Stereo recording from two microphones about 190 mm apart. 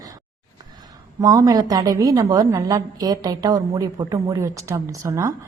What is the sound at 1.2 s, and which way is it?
A woman's voice, 15° right (ahead or behind).